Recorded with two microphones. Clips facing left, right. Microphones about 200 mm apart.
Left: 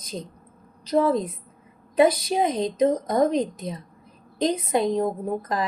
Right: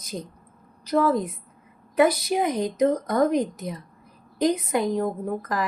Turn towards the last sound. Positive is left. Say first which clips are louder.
# left 1 dB
turn(degrees=25)  # may be behind; listen again after turning